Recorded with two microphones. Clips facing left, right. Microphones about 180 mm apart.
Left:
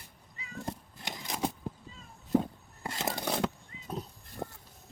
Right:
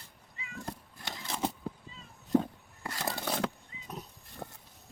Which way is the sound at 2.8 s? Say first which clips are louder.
Left 2 dB; 20° left (ahead or behind).